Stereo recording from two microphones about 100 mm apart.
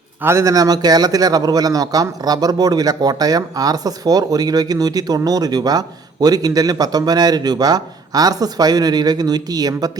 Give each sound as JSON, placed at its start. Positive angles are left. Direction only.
{"t": 0.2, "sound": "speech", "side_deg": -25}